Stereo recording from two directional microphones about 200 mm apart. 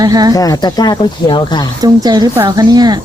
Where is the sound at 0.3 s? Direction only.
20° left (ahead or behind).